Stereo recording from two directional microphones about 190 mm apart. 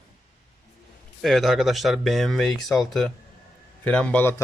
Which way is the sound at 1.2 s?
Centre (ahead or behind).